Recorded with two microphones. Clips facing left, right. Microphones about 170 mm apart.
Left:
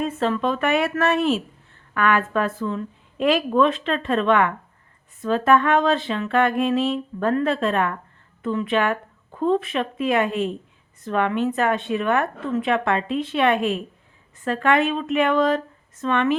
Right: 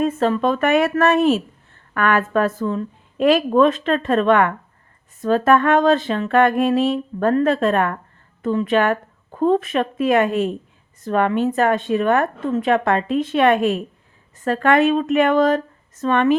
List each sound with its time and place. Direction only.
0.0 s speech: 45° right (ahead or behind)